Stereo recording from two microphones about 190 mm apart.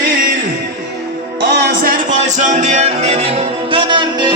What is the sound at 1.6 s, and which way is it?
Music, 45° right (ahead or behind).